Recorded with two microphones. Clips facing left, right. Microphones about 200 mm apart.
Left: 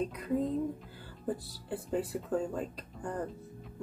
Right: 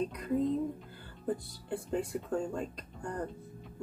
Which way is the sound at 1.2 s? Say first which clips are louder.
Right 1 dB; 5° left (ahead or behind).